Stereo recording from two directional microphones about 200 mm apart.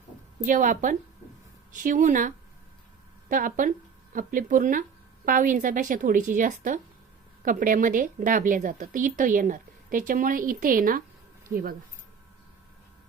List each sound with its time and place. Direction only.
0.4 s a woman's voice: 40° right (ahead or behind)